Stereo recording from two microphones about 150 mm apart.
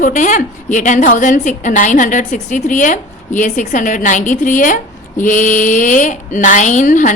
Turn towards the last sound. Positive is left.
turn(degrees=55)  # may be behind; listen again after turning